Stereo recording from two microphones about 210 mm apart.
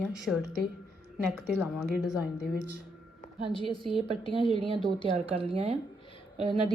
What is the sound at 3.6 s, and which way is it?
A woman's voice, 25° right (ahead or behind).